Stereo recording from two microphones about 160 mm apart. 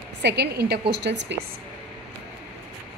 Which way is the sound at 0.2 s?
90° right.